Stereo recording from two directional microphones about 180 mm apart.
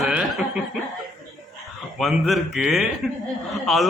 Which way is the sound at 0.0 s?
Centre (ahead or behind).